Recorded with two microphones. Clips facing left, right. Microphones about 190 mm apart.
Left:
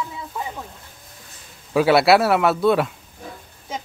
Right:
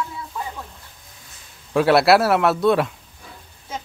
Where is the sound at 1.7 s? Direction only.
Centre (ahead or behind).